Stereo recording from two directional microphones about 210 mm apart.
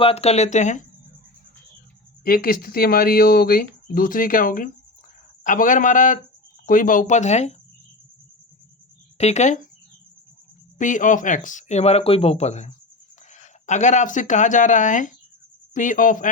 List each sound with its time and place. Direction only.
0.0 s speech: 30° left (ahead or behind)
2.2 s speech: 45° left (ahead or behind)
9.1 s speech: 30° left (ahead or behind)
10.8 s speech: 35° left (ahead or behind)